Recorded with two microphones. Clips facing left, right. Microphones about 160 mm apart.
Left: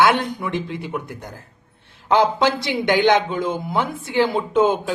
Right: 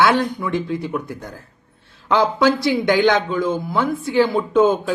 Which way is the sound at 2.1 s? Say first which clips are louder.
Right 1 dB; 20° left (ahead or behind).